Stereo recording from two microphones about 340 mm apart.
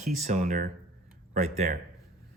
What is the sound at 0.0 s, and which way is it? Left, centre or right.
Speech, centre.